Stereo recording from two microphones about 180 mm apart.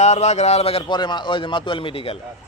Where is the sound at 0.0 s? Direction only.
40° left (ahead or behind).